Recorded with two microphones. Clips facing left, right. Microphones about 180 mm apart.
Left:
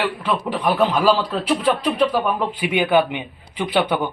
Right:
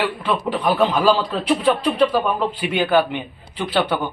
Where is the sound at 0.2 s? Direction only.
5° left (ahead or behind).